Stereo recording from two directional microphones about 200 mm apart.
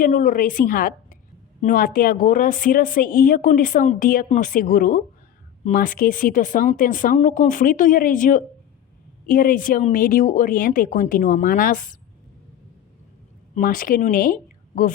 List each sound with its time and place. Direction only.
0.0 s a woman's voice: 40° left (ahead or behind)
13.6 s a woman's voice: 45° left (ahead or behind)